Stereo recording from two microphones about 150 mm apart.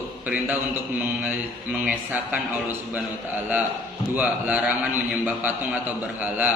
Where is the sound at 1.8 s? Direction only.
10° right (ahead or behind).